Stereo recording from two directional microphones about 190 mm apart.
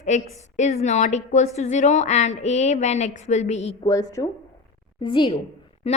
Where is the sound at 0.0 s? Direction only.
40° left (ahead or behind).